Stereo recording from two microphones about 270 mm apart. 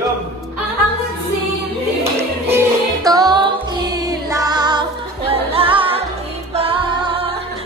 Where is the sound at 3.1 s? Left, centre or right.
Centre.